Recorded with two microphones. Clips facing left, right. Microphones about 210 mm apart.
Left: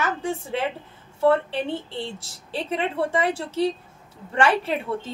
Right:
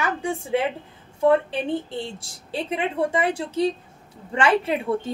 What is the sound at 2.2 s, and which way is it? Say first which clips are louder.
A woman's voice: right 1 dB; 15° right (ahead or behind).